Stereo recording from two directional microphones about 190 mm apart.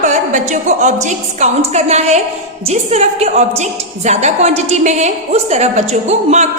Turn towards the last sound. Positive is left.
turn(degrees=-35)  # may be behind; listen again after turning